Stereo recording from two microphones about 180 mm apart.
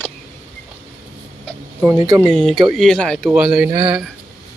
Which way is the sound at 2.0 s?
20° right (ahead or behind).